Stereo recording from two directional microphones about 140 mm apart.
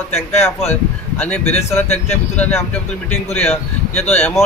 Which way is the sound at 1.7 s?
15° left (ahead or behind).